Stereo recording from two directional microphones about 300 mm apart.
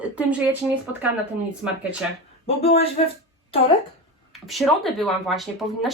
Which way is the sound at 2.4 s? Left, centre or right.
Centre.